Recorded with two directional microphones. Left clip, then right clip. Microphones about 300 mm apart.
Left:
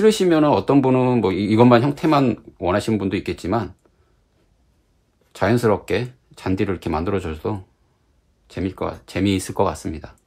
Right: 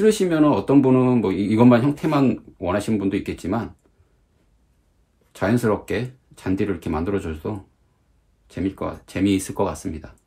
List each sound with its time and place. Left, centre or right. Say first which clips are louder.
0.0 s speech: left 2 dB; left
5.3 s speech: left 3 dB; left